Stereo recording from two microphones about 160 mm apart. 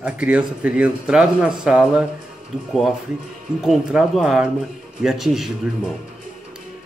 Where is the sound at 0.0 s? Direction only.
10° right (ahead or behind).